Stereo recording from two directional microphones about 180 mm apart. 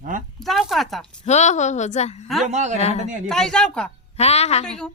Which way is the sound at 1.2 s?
40° left (ahead or behind).